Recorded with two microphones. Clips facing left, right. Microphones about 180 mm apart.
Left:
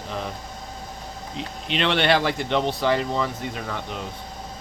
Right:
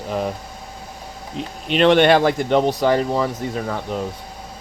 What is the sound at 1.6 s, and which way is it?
Speech, 45° right (ahead or behind).